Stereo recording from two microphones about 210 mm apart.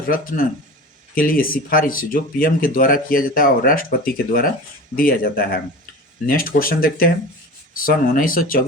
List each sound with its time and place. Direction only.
0.1 s speech: 40° left (ahead or behind)